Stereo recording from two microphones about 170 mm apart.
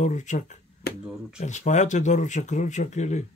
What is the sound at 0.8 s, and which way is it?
Finger snapping, 65° left (ahead or behind).